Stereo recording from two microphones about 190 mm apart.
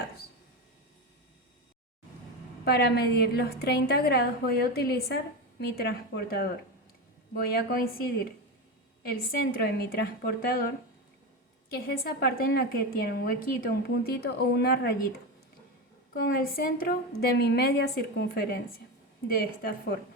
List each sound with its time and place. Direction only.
2.6 s a woman's voice: 55° left (ahead or behind)
9.0 s a woman's voice: 55° left (ahead or behind)
11.7 s a woman's voice: 55° left (ahead or behind)
16.1 s a woman's voice: 55° left (ahead or behind)